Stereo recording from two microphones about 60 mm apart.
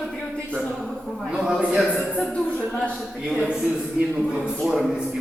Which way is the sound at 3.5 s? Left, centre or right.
Centre.